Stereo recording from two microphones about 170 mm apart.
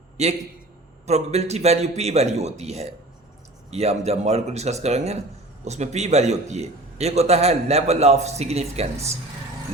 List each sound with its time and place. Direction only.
0.2 s a man's voice: 40° right (ahead or behind)